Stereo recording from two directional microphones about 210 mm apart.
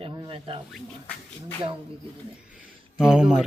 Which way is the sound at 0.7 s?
5° left (ahead or behind).